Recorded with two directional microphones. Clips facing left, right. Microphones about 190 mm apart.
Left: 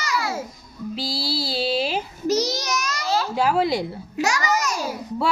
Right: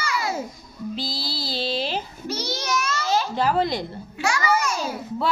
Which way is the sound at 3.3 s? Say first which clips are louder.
Left 2 dB; 5° left (ahead or behind).